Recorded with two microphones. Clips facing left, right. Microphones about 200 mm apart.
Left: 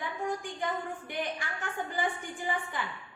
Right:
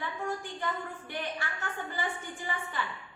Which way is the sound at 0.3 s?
15° left (ahead or behind).